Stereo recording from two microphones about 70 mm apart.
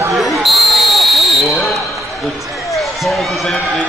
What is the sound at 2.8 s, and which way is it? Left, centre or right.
Speech, centre.